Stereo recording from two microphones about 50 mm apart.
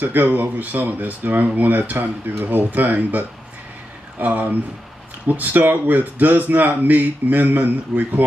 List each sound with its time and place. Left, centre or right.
0.0 s a man's voice: right